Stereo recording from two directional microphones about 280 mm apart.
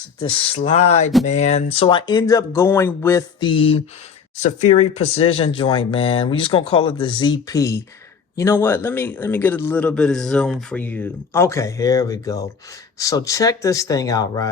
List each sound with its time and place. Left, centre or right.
0.2 s a man's voice: centre